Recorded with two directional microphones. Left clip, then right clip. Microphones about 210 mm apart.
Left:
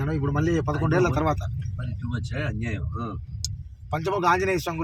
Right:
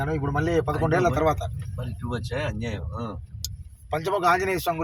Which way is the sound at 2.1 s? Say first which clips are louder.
Right 3 dB; 50° right (ahead or behind).